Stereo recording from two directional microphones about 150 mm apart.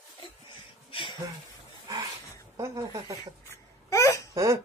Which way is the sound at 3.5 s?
20° left (ahead or behind).